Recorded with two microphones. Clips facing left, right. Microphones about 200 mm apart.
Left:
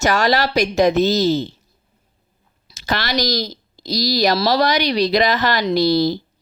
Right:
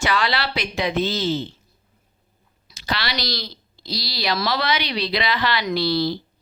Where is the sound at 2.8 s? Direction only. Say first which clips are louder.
Left 6 dB; 45° left (ahead or behind).